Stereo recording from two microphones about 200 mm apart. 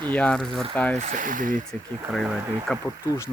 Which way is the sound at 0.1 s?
5° left (ahead or behind).